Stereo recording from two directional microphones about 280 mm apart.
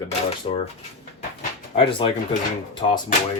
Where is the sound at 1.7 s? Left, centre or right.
Centre.